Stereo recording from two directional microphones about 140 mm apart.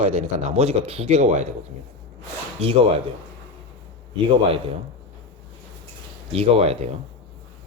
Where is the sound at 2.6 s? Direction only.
40° right (ahead or behind).